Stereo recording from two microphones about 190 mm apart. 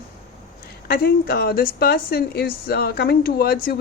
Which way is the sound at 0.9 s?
50° left (ahead or behind).